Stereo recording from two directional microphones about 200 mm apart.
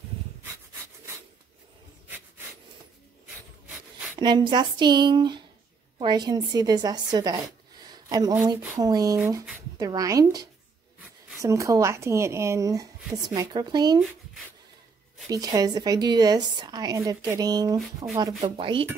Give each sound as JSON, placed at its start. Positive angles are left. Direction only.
{"t": 2.0, "sound": "a sound", "side_deg": -10}
{"t": 4.2, "sound": "a woman's voice", "side_deg": -20}
{"t": 15.2, "sound": "a woman's voice", "side_deg": -20}